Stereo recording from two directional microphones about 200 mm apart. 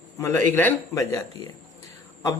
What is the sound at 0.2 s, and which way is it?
Speech, 15° left (ahead or behind).